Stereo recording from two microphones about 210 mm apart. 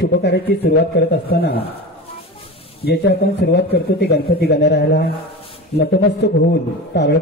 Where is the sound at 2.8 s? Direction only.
50° left (ahead or behind).